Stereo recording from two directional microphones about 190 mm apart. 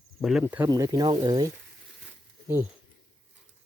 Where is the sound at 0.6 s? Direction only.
20° right (ahead or behind).